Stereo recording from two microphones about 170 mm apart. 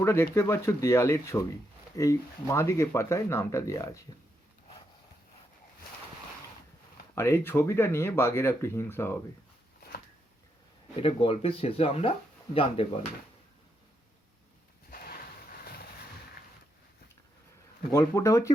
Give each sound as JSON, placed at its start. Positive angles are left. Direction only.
{"t": 0.0, "sound": "speech", "side_deg": 15}
{"t": 7.2, "sound": "speech", "side_deg": 15}
{"t": 11.0, "sound": "speech", "side_deg": 35}
{"t": 14.8, "sound": "a sound", "side_deg": 60}
{"t": 17.9, "sound": "speech", "side_deg": 15}